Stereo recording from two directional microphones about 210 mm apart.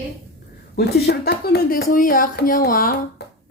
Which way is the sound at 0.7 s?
50° left (ahead or behind).